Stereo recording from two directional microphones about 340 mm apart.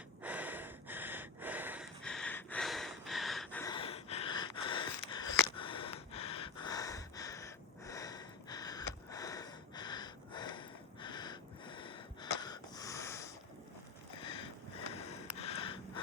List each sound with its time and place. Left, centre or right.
0.2 s snort: centre
14.2 s a sound: centre
14.9 s snort: centre